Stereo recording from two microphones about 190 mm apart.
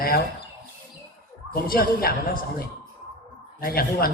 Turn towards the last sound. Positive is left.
turn(degrees=50)  # may be behind; listen again after turning